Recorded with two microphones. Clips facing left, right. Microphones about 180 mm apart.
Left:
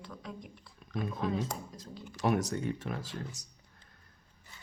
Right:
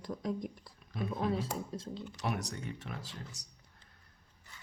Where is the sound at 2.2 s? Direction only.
45° left (ahead or behind).